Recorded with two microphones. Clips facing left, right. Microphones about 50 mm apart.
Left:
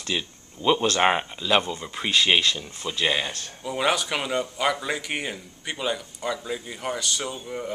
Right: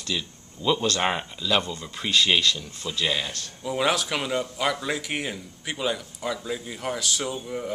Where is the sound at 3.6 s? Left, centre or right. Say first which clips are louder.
Even; centre.